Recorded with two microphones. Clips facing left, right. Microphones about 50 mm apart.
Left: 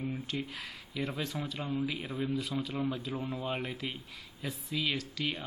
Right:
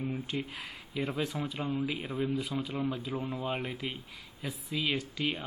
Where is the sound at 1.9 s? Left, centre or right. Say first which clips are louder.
Right 2 dB; centre.